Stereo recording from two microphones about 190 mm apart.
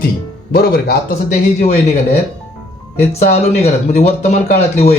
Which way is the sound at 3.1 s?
35° left (ahead or behind).